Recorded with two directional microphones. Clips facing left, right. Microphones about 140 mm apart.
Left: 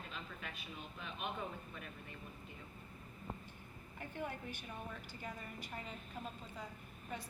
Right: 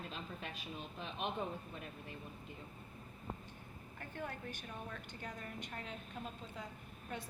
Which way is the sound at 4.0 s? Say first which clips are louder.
Left 1 dB; 15° left (ahead or behind).